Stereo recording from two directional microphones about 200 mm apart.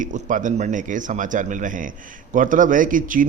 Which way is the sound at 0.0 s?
40° right (ahead or behind).